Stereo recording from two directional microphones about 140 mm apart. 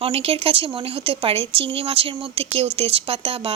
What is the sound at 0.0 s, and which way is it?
Speech, 45° right (ahead or behind).